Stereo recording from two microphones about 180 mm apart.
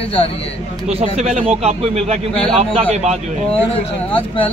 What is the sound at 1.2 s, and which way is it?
A man's voice, 40° right (ahead or behind).